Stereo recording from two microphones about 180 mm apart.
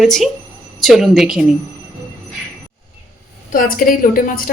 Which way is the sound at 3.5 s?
50° left (ahead or behind).